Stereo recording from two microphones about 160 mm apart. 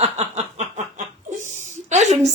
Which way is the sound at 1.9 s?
45° right (ahead or behind).